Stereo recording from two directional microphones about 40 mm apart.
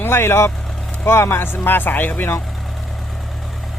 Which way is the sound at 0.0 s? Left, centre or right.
Left.